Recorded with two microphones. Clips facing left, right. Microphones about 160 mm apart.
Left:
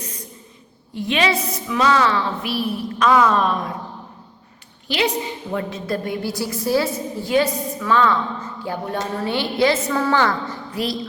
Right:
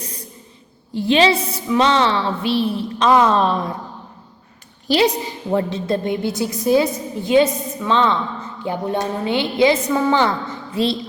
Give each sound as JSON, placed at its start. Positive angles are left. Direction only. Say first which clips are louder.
{"t": 0.9, "sound": "a woman's voice", "louder": "right 5 dB", "side_deg": -30}
{"t": 4.9, "sound": "a woman's voice", "louder": "right 5 dB", "side_deg": -35}